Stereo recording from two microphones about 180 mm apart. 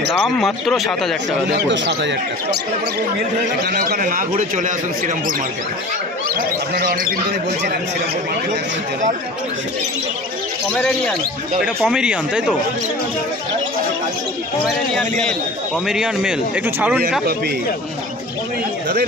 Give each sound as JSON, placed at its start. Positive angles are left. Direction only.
{"t": 0.1, "sound": "a man's voice", "side_deg": 0}
{"t": 1.5, "sound": "speech", "side_deg": -70}
{"t": 3.6, "sound": "a man's voice", "side_deg": -55}
{"t": 6.2, "sound": "a man's voice", "side_deg": -50}
{"t": 10.7, "sound": "a man's voice", "side_deg": 5}
{"t": 14.6, "sound": "a man's voice", "side_deg": 5}